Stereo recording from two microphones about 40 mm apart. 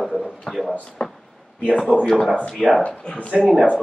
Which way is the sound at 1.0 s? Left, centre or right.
Left.